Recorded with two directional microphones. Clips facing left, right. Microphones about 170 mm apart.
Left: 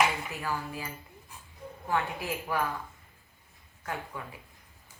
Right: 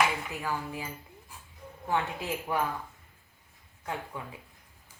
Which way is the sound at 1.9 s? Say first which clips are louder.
Even; 20° right (ahead or behind).